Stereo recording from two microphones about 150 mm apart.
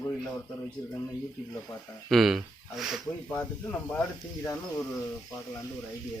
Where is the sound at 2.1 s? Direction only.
Centre (ahead or behind).